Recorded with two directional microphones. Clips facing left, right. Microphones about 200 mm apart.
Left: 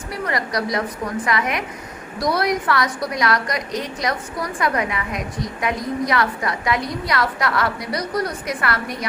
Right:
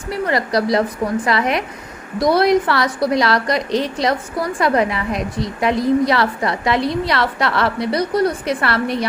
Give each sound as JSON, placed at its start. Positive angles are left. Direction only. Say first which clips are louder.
{"t": 0.1, "sound": "a woman's voice", "louder": "right 6 dB", "side_deg": -30}